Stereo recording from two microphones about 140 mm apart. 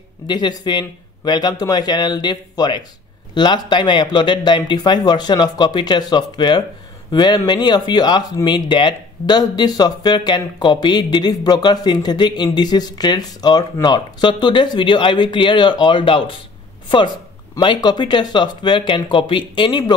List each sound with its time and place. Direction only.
0.3 s speech: 30° left (ahead or behind)
17.6 s speech: 35° left (ahead or behind)